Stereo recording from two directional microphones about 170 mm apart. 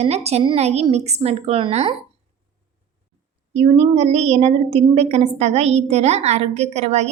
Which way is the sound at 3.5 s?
40° right (ahead or behind).